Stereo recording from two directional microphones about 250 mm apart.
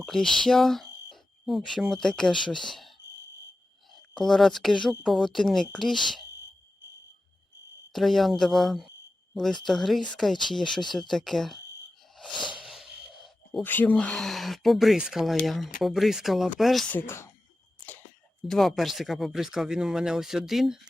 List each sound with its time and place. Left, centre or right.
0.0 s speech: centre
2.3 s speech: centre
2.6 s speech: centre
4.2 s speech: centre
7.9 s speech: centre
12.1 s a sound: centre
12.5 s speech: centre
17.7 s a sound: centre
18.4 s speech: centre